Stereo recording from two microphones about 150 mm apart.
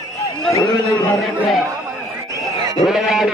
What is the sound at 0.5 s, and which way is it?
Speech, 25° left (ahead or behind).